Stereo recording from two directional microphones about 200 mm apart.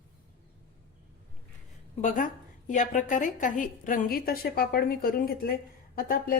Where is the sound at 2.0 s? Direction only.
40° left (ahead or behind).